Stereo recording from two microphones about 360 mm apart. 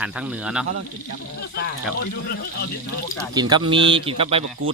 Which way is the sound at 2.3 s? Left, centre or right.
Left.